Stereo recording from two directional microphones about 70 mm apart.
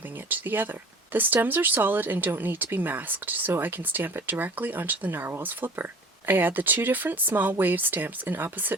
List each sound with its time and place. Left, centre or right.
0.3 s speech: right